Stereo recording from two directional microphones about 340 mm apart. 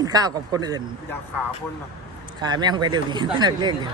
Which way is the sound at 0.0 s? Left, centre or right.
Centre.